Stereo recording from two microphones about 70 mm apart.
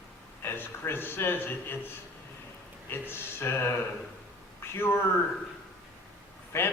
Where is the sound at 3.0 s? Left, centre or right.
Left.